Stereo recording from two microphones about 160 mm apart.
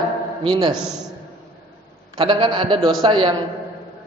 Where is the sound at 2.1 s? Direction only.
30° right (ahead or behind).